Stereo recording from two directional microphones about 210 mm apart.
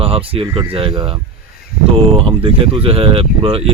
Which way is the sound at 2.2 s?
25° right (ahead or behind).